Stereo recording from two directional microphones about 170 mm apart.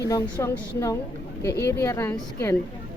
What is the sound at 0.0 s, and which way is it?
Speech, 20° left (ahead or behind).